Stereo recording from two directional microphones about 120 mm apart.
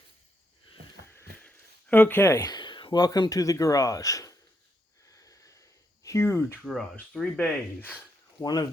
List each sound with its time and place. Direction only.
1.1 s speech: 15° left (ahead or behind)
5.0 s a sound: 30° left (ahead or behind)
6.0 s speech: 25° left (ahead or behind)
7.1 s speech: 5° left (ahead or behind)
8.4 s speech: 35° left (ahead or behind)